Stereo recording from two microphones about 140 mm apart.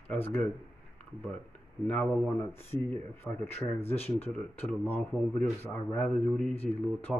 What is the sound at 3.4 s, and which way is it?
Speech, 45° left (ahead or behind).